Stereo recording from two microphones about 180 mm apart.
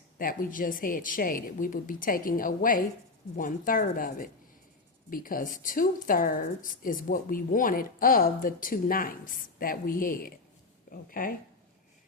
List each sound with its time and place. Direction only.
0.2 s speech: 50° left (ahead or behind)